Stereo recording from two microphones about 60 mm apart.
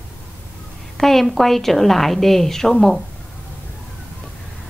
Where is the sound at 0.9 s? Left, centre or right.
Centre.